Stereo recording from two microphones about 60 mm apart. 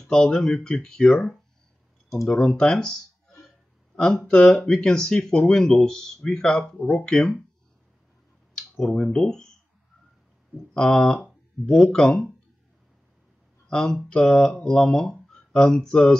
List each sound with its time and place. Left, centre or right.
0.0 s speech: centre
2.2 s a sound: centre
4.3 s speech: centre
7.2 s speech: centre
8.5 s speech: centre
10.7 s speech: centre
13.7 s speech: centre